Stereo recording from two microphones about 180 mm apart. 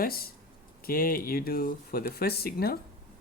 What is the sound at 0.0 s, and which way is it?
Speech, 55° left (ahead or behind).